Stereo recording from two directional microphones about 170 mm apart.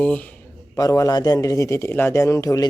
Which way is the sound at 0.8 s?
20° left (ahead or behind).